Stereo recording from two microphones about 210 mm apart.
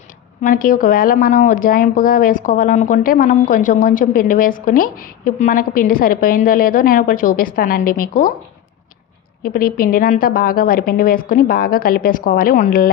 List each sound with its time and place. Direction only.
0.4 s speech: 40° left (ahead or behind)
9.4 s a woman's voice: 45° left (ahead or behind)